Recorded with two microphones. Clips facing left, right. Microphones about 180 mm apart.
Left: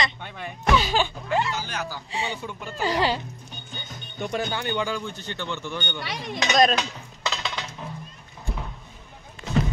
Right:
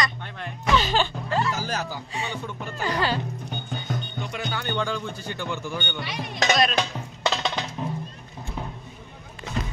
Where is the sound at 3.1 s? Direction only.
60° right (ahead or behind).